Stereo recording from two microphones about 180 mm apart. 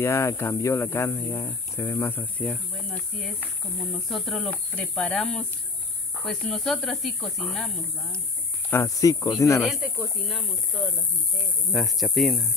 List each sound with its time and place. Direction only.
0.0 s speech: 15° left (ahead or behind)
8.6 s speech: 15° left (ahead or behind)
9.6 s speech: 5° right (ahead or behind)